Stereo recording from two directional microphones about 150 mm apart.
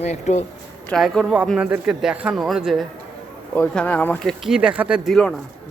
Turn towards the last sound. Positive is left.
turn(degrees=0)  # may be behind; listen again after turning